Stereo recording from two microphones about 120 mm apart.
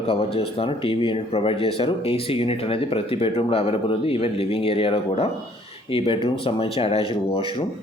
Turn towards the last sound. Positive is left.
turn(degrees=45)  # may be behind; listen again after turning